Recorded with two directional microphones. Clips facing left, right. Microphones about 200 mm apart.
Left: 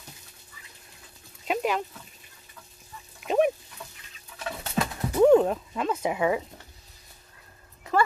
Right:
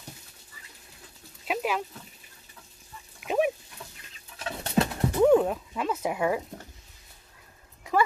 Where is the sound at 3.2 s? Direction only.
5° right (ahead or behind).